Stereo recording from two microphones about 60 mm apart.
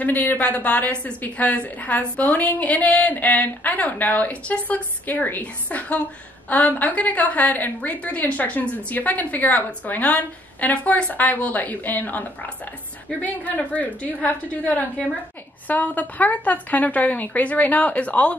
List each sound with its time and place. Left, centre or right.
0.0 s a woman's voice: left